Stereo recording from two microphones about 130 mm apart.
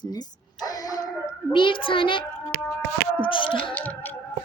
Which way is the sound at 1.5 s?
40° left (ahead or behind).